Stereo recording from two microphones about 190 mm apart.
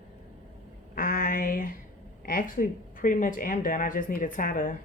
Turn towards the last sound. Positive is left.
turn(degrees=45)  # may be behind; listen again after turning